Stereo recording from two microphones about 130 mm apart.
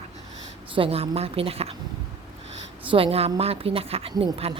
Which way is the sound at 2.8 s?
45° right (ahead or behind).